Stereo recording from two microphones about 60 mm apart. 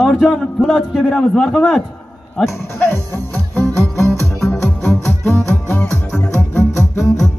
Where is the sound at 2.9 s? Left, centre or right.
Left.